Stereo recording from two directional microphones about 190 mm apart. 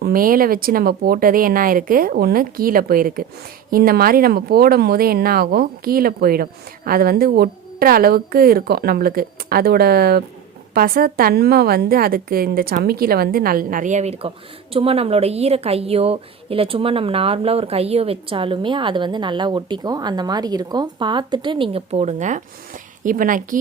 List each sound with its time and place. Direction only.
0.0 s a woman's voice: 50° right (ahead or behind)